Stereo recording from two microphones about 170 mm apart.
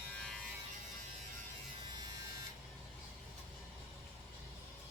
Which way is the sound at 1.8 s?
25° right (ahead or behind).